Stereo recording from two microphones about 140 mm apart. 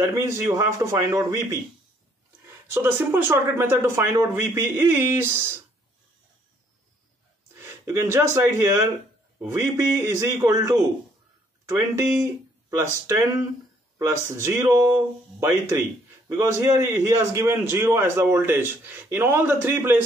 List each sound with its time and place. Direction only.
0.0 s a man's voice: 20° right (ahead or behind)
7.5 s a man's voice: 20° right (ahead or behind)